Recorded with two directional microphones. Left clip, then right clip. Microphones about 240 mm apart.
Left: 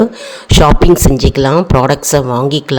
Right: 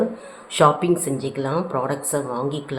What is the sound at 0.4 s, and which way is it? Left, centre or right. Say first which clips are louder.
Speech: left 8 dB; left.